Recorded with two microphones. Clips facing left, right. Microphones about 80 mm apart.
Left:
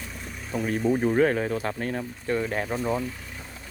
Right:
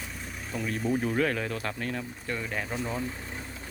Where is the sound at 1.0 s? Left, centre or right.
Left.